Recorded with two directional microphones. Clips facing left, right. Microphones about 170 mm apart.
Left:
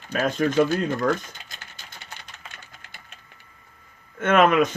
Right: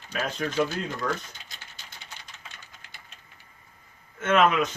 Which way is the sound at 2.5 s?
55° left (ahead or behind).